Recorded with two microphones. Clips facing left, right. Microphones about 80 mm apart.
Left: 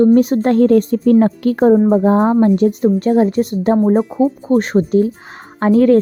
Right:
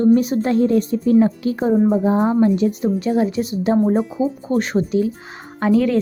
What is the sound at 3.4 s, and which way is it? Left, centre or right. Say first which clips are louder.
Speech: left 6 dB; left.